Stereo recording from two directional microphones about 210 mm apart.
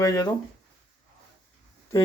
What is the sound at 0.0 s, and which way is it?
Speech, 15° left (ahead or behind).